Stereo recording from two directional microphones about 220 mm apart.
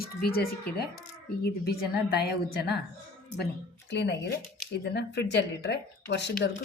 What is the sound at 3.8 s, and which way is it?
Speech, 50° left (ahead or behind).